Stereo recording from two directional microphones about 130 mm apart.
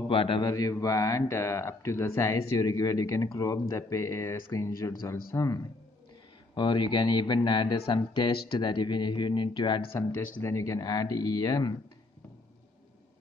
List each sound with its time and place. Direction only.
0.1 s a man's voice: 45° left (ahead or behind)
0.5 s speech: 25° left (ahead or behind)
6.5 s speech: 35° left (ahead or behind)
9.9 s speech: 20° left (ahead or behind)